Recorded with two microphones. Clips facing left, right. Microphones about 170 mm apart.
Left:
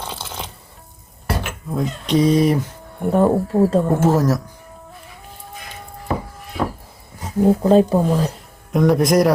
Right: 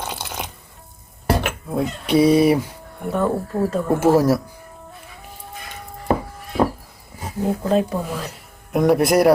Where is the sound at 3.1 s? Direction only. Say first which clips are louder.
Left 5 dB; 30° left (ahead or behind).